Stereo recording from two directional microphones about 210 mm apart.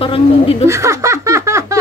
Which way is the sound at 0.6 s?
15° right (ahead or behind).